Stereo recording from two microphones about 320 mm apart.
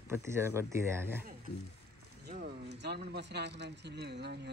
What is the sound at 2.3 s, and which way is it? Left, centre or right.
Speech, right.